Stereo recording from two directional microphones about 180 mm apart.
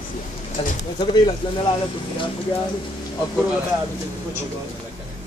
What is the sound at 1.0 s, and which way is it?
Speech, 25° left (ahead or behind).